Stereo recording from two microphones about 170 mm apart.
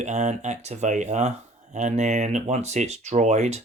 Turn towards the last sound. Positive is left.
turn(degrees=-40)  # may be behind; listen again after turning